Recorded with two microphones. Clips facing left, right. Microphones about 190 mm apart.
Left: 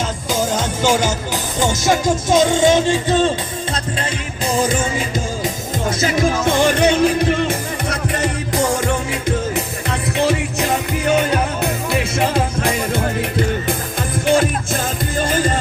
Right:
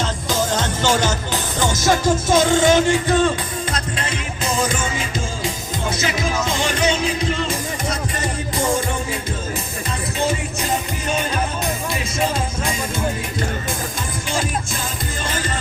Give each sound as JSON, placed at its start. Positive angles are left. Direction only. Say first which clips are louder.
{"t": 0.3, "sound": "music", "louder": "left 2 dB", "side_deg": 10}
{"t": 4.5, "sound": "music", "louder": "left 5 dB", "side_deg": 35}
{"t": 6.4, "sound": "music", "louder": "left 6 dB", "side_deg": 55}
{"t": 10.2, "sound": "music", "louder": "left 5 dB", "side_deg": 70}